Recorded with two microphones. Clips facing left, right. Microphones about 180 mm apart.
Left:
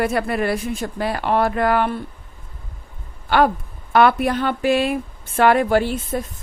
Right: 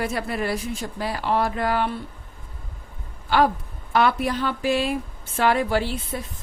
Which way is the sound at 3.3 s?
60° left (ahead or behind).